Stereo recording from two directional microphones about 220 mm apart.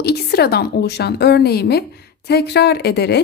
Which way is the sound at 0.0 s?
45° left (ahead or behind).